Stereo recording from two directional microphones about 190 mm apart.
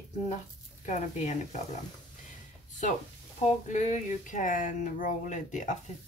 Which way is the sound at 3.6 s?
40° left (ahead or behind).